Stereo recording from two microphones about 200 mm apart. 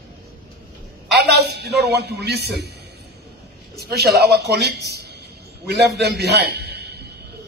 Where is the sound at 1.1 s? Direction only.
55° right (ahead or behind).